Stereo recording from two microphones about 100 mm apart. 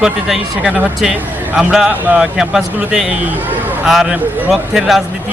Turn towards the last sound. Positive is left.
turn(degrees=-5)  # may be behind; listen again after turning